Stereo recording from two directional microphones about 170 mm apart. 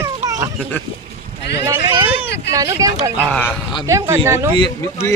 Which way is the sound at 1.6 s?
25° right (ahead or behind).